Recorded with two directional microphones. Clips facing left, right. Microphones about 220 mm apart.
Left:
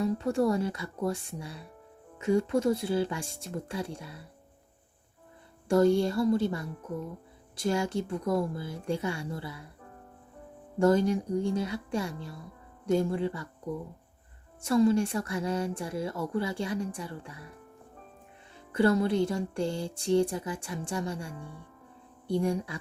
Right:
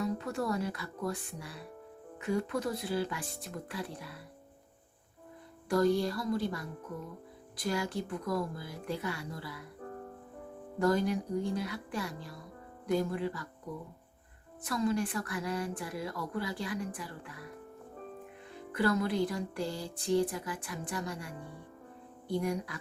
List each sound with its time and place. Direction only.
0.0 s music: 30° left (ahead or behind)
5.6 s music: 25° left (ahead or behind)
10.8 s music: 25° left (ahead or behind)
14.7 s music: 30° left (ahead or behind)
18.7 s music: 25° left (ahead or behind)
22.4 s music: 25° left (ahead or behind)